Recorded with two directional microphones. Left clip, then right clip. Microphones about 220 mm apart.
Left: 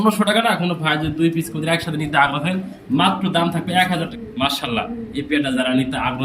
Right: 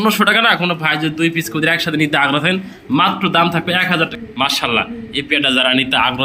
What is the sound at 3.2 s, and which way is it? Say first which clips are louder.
Speech: right 6 dB; 90° right.